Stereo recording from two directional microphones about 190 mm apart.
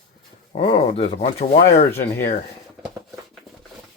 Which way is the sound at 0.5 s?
30° left (ahead or behind).